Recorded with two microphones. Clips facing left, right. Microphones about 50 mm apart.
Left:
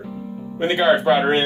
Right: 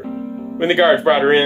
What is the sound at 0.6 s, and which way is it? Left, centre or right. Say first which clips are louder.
Speech: right 5 dB; right.